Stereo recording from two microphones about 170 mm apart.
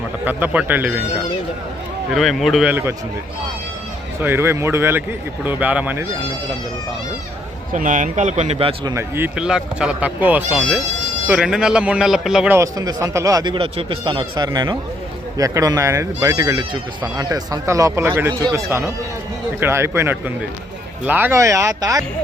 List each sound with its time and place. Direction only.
0.3 s speech: 10° right (ahead or behind)
2.1 s speech: centre (ahead or behind)
4.2 s speech: 15° right (ahead or behind)
7.7 s speech: 50° right (ahead or behind); by 8.9 s 35° right (ahead or behind)
8.9 s speech: 15° right (ahead or behind)
12.5 s speech: 20° right (ahead or behind)